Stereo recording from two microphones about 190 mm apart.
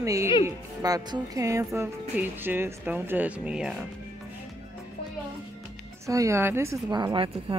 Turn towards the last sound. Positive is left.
turn(degrees=-20)  # may be behind; listen again after turning